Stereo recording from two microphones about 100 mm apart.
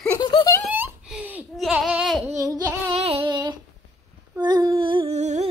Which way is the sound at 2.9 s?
85° right.